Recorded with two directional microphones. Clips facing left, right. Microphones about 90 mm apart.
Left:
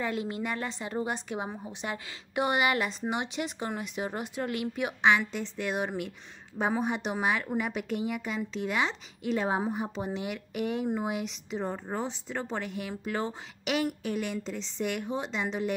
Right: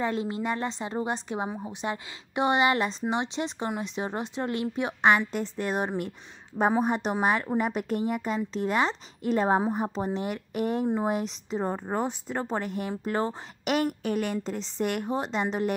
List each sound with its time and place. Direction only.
0.0 s a woman's voice: 30° right (ahead or behind)
5.0 s a woman's voice: 45° right (ahead or behind)